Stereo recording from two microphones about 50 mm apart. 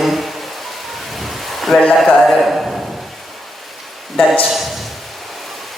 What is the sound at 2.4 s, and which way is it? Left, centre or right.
Speech, centre.